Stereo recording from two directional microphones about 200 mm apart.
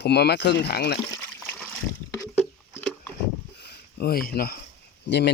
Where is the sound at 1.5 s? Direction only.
5° left (ahead or behind).